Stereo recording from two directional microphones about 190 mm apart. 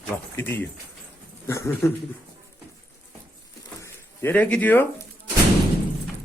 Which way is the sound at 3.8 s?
10° left (ahead or behind).